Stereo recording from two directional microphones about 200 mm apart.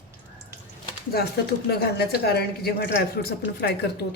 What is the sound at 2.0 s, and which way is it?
Speech, 50° left (ahead or behind).